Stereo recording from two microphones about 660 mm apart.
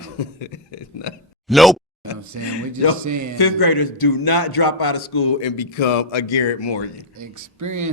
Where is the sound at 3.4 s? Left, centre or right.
Left.